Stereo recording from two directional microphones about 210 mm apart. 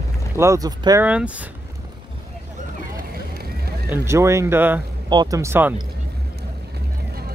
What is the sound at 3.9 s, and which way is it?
Speech, 15° right (ahead or behind).